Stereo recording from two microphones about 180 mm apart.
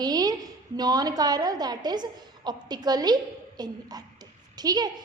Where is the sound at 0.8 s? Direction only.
20° right (ahead or behind).